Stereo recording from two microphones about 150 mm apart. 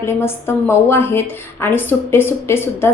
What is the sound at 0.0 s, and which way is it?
A woman's voice, 15° left (ahead or behind).